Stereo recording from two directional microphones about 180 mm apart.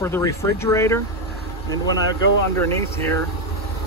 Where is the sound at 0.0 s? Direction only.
15° left (ahead or behind).